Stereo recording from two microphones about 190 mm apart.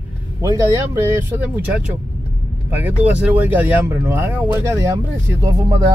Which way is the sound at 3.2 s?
10° right (ahead or behind).